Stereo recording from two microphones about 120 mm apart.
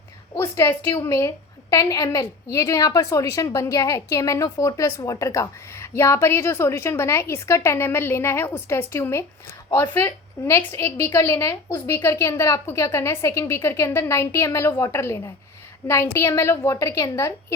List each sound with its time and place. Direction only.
0.3 s a woman's voice: 20° left (ahead or behind)